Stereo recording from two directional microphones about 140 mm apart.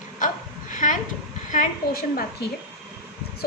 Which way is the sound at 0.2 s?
65° left (ahead or behind).